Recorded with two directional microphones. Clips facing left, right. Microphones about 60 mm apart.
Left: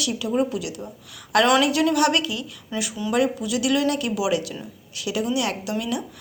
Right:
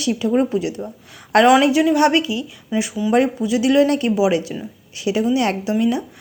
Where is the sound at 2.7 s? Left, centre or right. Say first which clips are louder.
Right 7 dB; centre.